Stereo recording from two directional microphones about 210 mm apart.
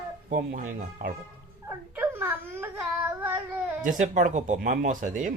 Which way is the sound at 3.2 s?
5° right (ahead or behind).